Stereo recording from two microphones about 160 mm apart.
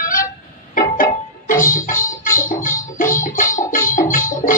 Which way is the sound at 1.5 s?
55° left (ahead or behind).